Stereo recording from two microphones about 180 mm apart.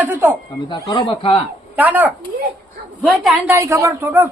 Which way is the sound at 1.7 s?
10° right (ahead or behind).